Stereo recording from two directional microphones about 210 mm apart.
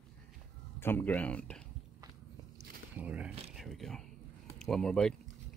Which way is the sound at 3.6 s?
Centre (ahead or behind).